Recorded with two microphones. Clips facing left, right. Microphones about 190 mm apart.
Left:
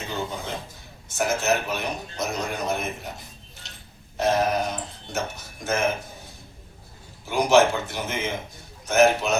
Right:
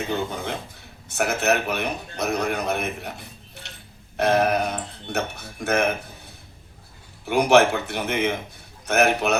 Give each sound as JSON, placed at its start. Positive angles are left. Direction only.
{"t": 0.1, "sound": "a man's voice", "side_deg": -60}
{"t": 7.3, "sound": "a man's voice", "side_deg": -60}